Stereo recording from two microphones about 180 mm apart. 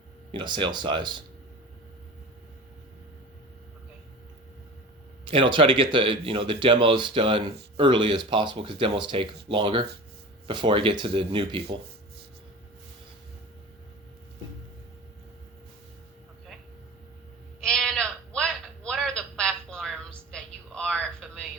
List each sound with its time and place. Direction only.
0.3 s speech: 25° right (ahead or behind)
5.2 s speech: 30° right (ahead or behind)
17.7 s sheep: 5° left (ahead or behind)
20.3 s a sound: 5° left (ahead or behind)